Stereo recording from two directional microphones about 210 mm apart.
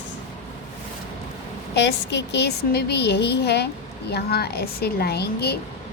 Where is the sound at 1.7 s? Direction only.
55° left (ahead or behind).